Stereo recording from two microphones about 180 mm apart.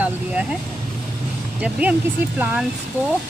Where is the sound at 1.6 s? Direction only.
10° right (ahead or behind).